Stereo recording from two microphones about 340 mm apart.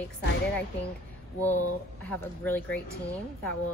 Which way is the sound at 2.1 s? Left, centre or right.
Centre.